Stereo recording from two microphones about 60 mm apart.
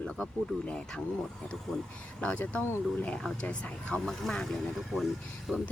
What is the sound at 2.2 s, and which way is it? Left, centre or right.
Speech, left.